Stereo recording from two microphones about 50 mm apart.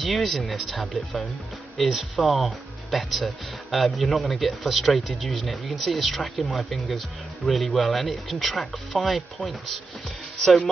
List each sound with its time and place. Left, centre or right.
0.0 s speech: centre